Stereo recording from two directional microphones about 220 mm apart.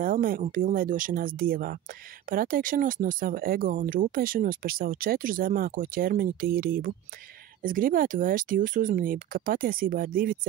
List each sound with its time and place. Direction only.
0.0 s speech: 40° right (ahead or behind)